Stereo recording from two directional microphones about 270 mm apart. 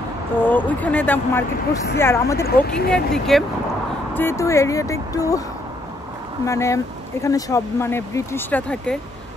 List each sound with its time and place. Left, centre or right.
0.4 s speech: centre
2.4 s speech: left
2.9 s speech: centre
6.4 s speech: centre